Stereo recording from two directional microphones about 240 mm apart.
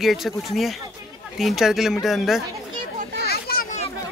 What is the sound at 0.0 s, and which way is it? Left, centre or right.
Speech, centre.